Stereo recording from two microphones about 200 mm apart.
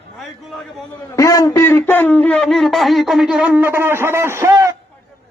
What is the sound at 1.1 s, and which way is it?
A man's voice, 15° left (ahead or behind).